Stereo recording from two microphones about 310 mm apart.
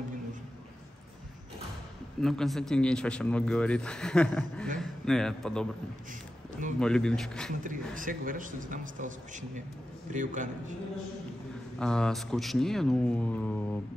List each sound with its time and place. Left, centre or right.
2.2 s a man's voice: centre
6.8 s a man's voice: centre
7.6 s a man's voice: right
11.8 s a man's voice: centre